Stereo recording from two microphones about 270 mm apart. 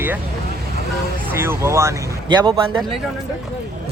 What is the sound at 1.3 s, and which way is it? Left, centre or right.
Speech, centre.